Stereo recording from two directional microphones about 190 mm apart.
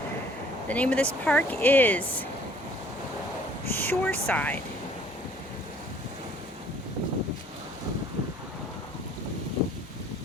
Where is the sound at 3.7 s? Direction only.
10° left (ahead or behind).